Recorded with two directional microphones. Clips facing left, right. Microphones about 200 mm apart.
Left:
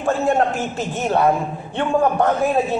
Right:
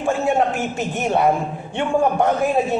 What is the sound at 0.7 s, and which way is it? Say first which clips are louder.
A man's voice: left 1 dB; 15° right (ahead or behind).